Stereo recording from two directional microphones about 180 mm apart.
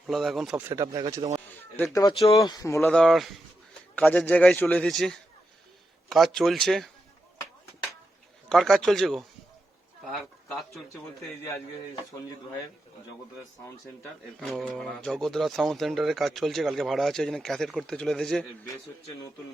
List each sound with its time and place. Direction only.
0.1 s speech: centre (ahead or behind)
0.6 s speech: 15° right (ahead or behind)
1.4 s a sound: 10° left (ahead or behind)
2.3 s speech: 25° left (ahead or behind)
2.9 s a man's voice: centre (ahead or behind)
8.4 s speech: centre (ahead or behind)
14.3 s speech: centre (ahead or behind)